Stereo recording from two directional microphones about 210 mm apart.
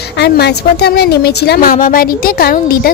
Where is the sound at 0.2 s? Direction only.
50° left (ahead or behind).